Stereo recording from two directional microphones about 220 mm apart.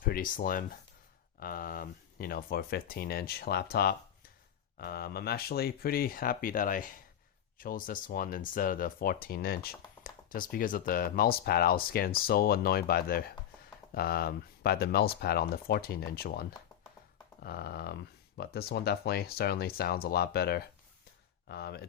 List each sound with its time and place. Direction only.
0.0 s speech: 40° left (ahead or behind)